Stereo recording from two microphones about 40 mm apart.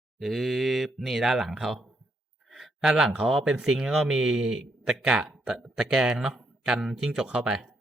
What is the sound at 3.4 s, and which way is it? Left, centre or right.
A man's voice, centre.